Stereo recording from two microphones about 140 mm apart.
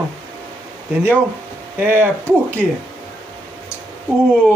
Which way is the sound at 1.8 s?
15° right (ahead or behind).